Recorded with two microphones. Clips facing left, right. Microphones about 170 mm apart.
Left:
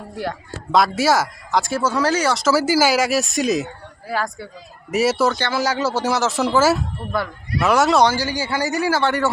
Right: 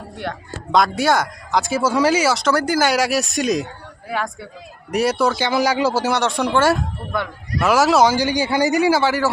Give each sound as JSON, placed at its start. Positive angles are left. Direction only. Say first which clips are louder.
{"t": 0.2, "sound": "speech", "louder": "left 2 dB", "side_deg": 0}
{"t": 5.4, "sound": "speech", "louder": "right 3 dB", "side_deg": -15}
{"t": 6.0, "sound": "speech", "louder": "even", "side_deg": 0}
{"t": 8.1, "sound": "speech", "louder": "right 4 dB", "side_deg": -15}